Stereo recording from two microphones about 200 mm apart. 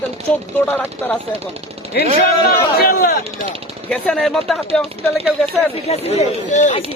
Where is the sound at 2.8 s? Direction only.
50° left (ahead or behind).